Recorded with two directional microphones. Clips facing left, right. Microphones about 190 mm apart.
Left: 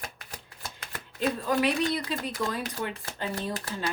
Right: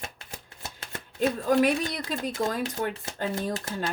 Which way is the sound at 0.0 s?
25° right (ahead or behind).